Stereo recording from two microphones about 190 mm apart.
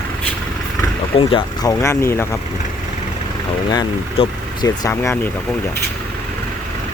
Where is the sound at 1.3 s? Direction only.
15° left (ahead or behind).